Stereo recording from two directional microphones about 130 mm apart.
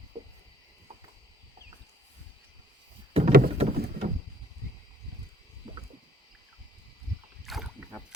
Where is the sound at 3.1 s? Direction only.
50° right (ahead or behind).